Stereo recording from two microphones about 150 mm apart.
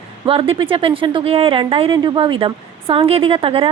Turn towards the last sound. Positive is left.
turn(degrees=-35)  # may be behind; listen again after turning